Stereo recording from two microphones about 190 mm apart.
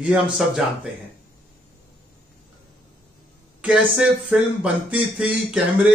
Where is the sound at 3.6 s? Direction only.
5° right (ahead or behind).